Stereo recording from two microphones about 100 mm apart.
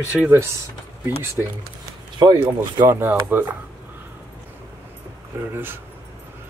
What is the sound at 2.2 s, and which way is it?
Speech, 45° right (ahead or behind).